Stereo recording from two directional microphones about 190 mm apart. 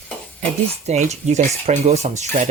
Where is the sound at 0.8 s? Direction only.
35° right (ahead or behind).